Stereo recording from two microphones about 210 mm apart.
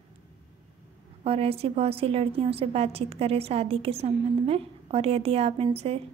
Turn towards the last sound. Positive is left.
turn(degrees=-30)  # may be behind; listen again after turning